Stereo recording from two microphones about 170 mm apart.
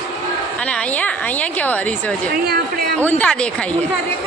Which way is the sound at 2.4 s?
65° right (ahead or behind).